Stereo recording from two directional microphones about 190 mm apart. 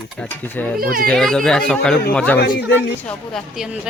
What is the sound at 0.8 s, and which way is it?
Speech, 50° right (ahead or behind).